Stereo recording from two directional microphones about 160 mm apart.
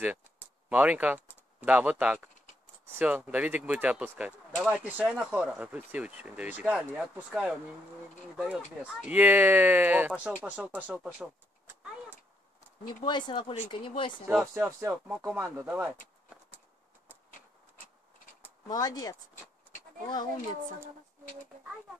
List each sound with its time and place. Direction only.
0.0 s speech: 10° right (ahead or behind)
13.0 s speech: 30° left (ahead or behind)
14.4 s speech: 15° right (ahead or behind)
15.0 s speech: 5° right (ahead or behind)
18.7 s speech: 25° left (ahead or behind)